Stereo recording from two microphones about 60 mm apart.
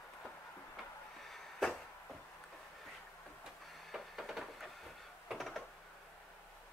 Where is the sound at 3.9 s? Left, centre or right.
Centre.